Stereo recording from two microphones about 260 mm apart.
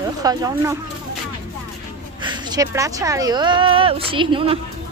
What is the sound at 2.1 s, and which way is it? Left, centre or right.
Speech, centre.